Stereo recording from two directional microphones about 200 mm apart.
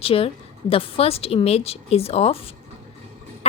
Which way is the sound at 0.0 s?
30° left (ahead or behind).